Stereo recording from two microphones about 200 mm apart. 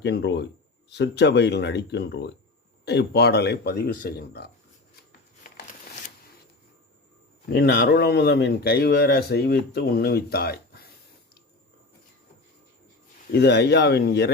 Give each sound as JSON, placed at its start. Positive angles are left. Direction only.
{"t": 0.0, "sound": "speech", "side_deg": 60}
{"t": 7.5, "sound": "speech", "side_deg": 55}
{"t": 13.3, "sound": "speech", "side_deg": 60}